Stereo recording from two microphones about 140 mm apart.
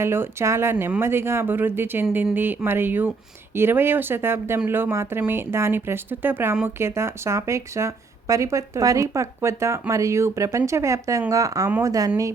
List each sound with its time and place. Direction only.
0.0 s speech: 20° right (ahead or behind)